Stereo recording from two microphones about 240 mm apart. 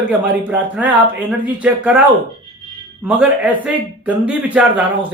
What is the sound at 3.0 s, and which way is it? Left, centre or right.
Speech, centre.